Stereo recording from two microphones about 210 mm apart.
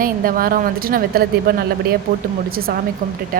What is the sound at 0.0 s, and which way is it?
A woman's voice, 45° right (ahead or behind).